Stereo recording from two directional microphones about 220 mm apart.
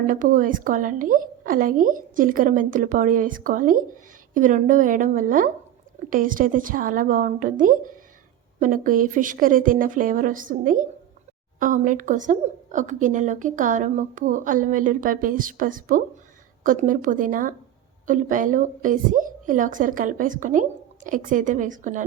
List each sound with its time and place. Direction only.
0.1 s a woman's voice: 35° right (ahead or behind)